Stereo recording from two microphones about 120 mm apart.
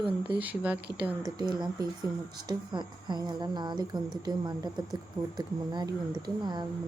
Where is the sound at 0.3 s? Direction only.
10° right (ahead or behind).